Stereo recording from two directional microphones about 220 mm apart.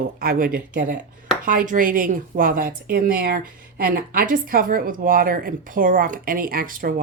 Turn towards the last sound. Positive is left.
turn(degrees=-40)  # may be behind; listen again after turning